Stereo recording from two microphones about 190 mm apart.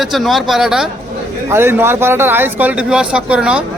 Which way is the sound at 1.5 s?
15° right (ahead or behind).